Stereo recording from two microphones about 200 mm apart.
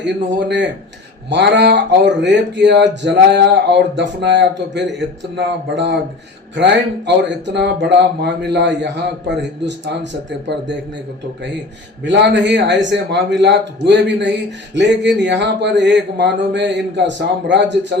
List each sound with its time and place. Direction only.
0.0 s speech: 60° right (ahead or behind)
12.0 s speech: 60° right (ahead or behind)